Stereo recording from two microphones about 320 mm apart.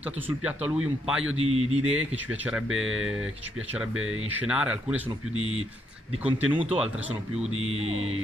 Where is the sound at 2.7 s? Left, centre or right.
Right.